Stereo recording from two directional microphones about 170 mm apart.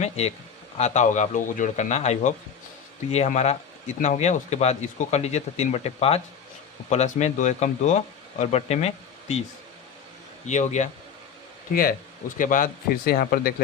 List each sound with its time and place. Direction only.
0.8 s a man's voice: 40° left (ahead or behind)
10.4 s a man's voice: 45° left (ahead or behind)
11.7 s speech: 60° left (ahead or behind)